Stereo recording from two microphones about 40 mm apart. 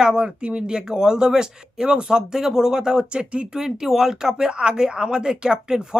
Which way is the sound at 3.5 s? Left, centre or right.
Centre.